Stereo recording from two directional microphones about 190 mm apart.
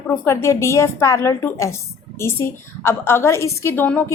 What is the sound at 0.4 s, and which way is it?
A woman's voice, 15° left (ahead or behind).